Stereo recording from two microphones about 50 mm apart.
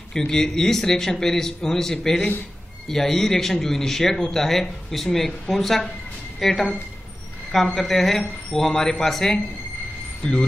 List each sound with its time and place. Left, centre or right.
0.3 s a man's voice: centre
10.2 s speech: left